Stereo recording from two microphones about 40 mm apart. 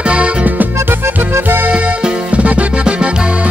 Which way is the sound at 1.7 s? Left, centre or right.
Right.